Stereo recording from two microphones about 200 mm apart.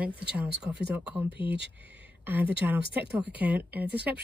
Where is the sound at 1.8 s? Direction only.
5° right (ahead or behind).